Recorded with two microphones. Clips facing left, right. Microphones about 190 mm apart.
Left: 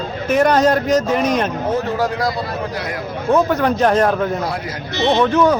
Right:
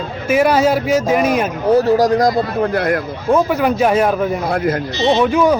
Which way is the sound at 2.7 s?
55° right (ahead or behind).